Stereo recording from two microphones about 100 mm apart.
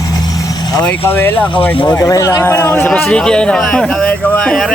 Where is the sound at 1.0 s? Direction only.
20° left (ahead or behind).